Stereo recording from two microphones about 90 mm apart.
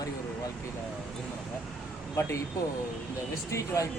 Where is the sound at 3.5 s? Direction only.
35° left (ahead or behind).